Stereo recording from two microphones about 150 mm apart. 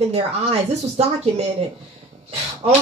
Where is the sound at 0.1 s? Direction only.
45° right (ahead or behind).